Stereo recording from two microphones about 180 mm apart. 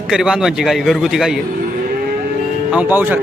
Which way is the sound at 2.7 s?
10° right (ahead or behind).